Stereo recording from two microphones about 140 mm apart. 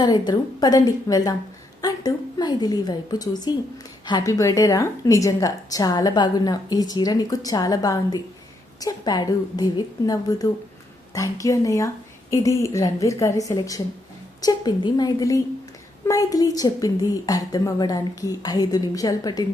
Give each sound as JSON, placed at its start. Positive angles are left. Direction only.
{"t": 0.0, "sound": "a woman's voice", "side_deg": 30}